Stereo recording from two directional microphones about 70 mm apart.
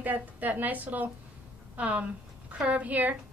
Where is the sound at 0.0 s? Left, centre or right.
Right.